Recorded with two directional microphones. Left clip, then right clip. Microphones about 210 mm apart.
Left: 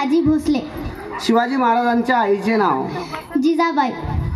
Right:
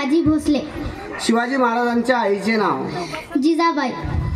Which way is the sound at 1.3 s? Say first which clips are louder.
Left 2 dB; 25° right (ahead or behind).